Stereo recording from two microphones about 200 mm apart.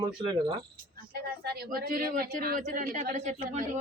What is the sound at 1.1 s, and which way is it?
Speech, 50° right (ahead or behind).